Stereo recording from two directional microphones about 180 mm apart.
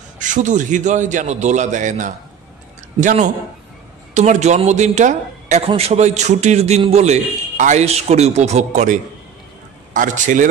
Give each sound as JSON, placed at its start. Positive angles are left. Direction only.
{"t": 0.2, "sound": "a man's voice", "side_deg": -45}